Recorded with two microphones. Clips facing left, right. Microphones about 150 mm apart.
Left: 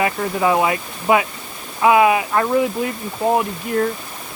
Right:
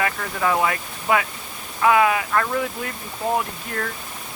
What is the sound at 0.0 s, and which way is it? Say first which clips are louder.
Speech: left 5 dB; 20° left (ahead or behind).